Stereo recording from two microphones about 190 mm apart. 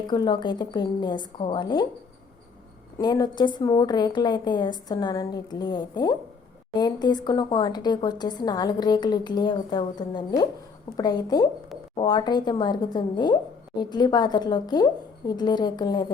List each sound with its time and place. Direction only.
0.1 s speech: 25° left (ahead or behind)
3.0 s speech: 20° left (ahead or behind)